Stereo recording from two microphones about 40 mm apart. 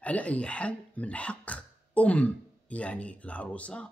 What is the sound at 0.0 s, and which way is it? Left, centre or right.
Speech, left.